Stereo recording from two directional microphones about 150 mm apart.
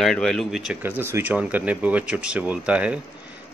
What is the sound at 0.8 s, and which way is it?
Speech, 15° right (ahead or behind).